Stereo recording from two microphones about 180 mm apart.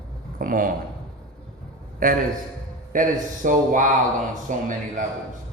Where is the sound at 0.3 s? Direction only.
50° right (ahead or behind).